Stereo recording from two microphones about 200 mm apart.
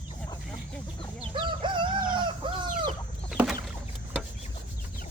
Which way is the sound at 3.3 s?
Centre (ahead or behind).